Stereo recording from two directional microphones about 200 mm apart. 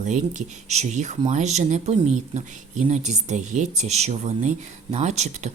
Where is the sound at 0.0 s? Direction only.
35° right (ahead or behind).